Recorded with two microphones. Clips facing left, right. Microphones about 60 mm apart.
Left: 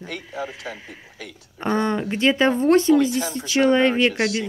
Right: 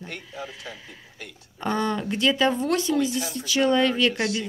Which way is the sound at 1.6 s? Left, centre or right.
Left.